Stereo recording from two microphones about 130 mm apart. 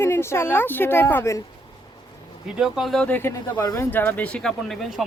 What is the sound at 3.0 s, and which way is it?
Speech, 15° left (ahead or behind).